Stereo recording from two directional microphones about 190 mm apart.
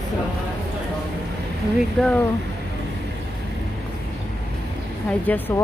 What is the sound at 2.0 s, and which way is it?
Speech, 5° left (ahead or behind).